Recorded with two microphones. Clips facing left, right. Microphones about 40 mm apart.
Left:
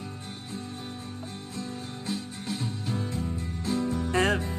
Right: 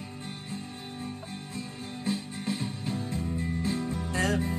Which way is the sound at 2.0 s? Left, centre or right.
Right.